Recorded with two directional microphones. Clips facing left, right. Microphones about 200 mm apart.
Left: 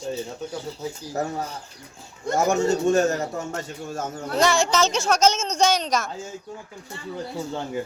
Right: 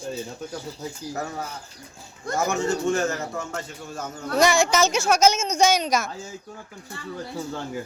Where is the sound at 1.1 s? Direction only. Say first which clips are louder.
Left 5 dB; 40° left (ahead or behind).